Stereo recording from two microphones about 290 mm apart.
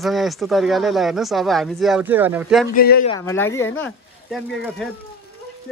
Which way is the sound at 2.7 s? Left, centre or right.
Left.